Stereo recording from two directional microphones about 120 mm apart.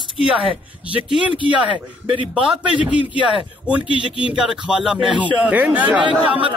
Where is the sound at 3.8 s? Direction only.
45° left (ahead or behind).